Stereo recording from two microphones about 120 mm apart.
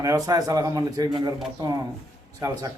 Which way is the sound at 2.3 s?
30° right (ahead or behind).